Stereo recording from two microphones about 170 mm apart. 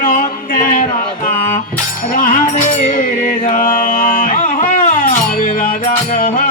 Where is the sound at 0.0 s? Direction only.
55° left (ahead or behind).